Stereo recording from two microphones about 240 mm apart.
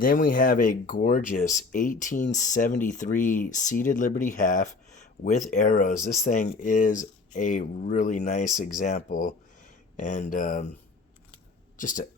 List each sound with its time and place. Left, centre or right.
0.0 s speech: left
11.8 s speech: left